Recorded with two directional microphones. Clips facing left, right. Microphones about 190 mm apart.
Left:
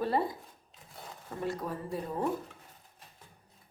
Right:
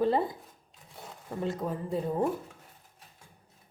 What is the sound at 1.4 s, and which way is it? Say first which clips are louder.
Speech: right 3 dB; 20° right (ahead or behind).